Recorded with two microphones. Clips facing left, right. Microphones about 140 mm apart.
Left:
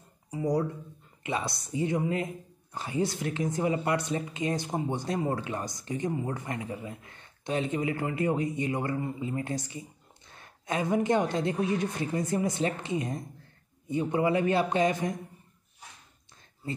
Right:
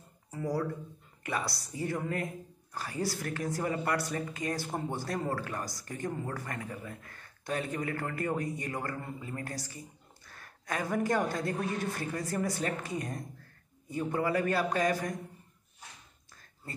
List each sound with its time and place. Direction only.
0.3 s speech: 15° left (ahead or behind)